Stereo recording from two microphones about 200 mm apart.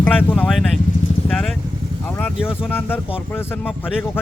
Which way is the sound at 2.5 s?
10° left (ahead or behind).